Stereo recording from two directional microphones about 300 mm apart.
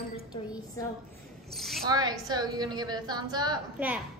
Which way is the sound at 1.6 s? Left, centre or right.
Centre.